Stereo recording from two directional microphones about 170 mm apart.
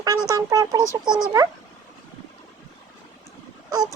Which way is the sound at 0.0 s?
20° right (ahead or behind).